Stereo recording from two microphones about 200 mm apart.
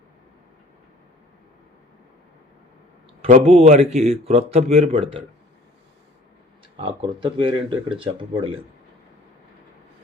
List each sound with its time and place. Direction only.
3.2 s speech: 35° right (ahead or behind)
6.7 s speech: 25° right (ahead or behind)